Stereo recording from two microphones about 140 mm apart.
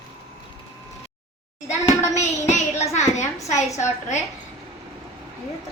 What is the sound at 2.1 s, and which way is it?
A child's voice, 55° left (ahead or behind).